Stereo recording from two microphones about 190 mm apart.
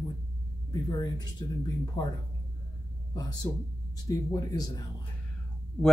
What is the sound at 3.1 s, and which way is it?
Speech, 20° left (ahead or behind).